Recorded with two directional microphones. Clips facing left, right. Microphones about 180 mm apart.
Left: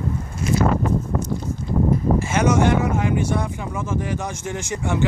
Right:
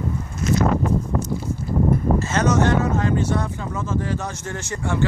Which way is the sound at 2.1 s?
10° left (ahead or behind).